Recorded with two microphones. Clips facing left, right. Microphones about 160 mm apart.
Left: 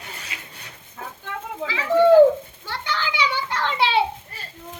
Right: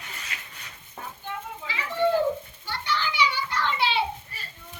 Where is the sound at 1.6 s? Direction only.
90° left.